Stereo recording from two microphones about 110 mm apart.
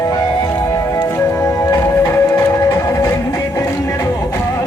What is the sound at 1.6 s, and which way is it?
Music, 30° left (ahead or behind).